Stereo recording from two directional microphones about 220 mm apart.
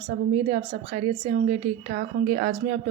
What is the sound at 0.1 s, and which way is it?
A woman's voice, 35° right (ahead or behind).